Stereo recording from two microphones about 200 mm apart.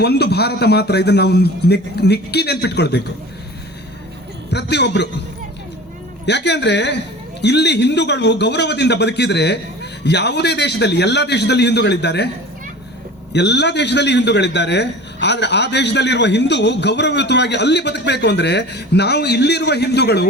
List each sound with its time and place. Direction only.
0.0 s a man's voice: 55° left (ahead or behind)
4.5 s a man's voice: 60° left (ahead or behind)
6.2 s a man's voice: 60° left (ahead or behind)
13.3 s a man's voice: 60° left (ahead or behind)